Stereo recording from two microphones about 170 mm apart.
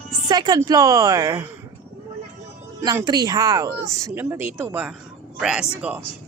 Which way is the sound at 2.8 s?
25° right (ahead or behind).